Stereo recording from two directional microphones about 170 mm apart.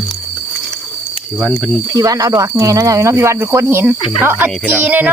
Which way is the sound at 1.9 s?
20° right (ahead or behind).